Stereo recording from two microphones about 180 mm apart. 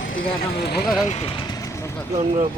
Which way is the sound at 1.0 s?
35° left (ahead or behind).